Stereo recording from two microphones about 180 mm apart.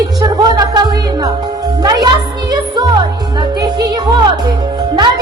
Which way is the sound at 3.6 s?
20° right (ahead or behind).